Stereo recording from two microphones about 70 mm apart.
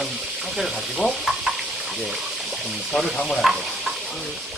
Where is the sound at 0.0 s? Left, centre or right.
Centre.